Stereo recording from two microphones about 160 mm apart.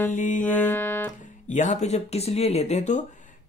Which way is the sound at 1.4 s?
50° left (ahead or behind).